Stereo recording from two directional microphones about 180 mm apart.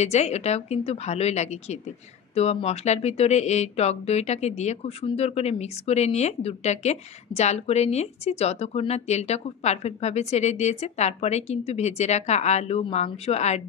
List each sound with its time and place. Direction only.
0.0 s speech: 35° left (ahead or behind)